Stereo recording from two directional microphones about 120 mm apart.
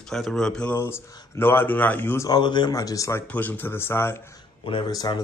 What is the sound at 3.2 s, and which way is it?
Speech, 15° left (ahead or behind).